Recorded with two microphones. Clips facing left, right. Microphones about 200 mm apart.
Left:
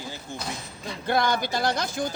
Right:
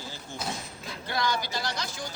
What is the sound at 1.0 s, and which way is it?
Speech, 55° left (ahead or behind).